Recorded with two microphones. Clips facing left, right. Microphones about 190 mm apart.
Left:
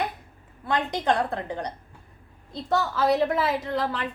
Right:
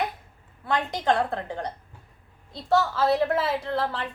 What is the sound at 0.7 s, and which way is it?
A woman's voice, 15° left (ahead or behind).